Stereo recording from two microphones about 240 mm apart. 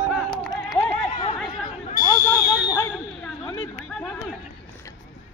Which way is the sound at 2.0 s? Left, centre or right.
Centre.